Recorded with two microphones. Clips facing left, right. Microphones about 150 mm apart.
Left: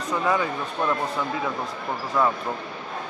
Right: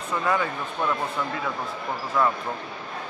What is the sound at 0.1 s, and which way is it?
Speech, 15° left (ahead or behind).